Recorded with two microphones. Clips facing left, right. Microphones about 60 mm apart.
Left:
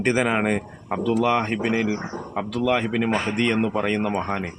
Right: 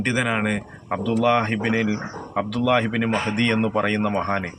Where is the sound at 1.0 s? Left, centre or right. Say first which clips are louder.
Right 1 dB; centre.